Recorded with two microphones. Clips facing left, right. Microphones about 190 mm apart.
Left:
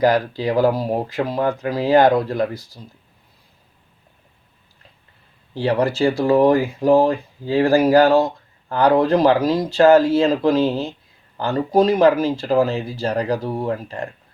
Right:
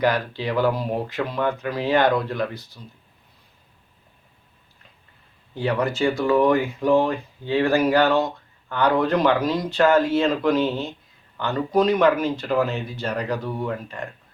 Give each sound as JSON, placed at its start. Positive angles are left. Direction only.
{"t": 0.0, "sound": "speech", "side_deg": 40}
{"t": 5.5, "sound": "speech", "side_deg": 35}